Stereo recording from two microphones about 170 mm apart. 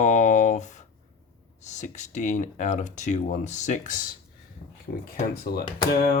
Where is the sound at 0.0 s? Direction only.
45° left (ahead or behind).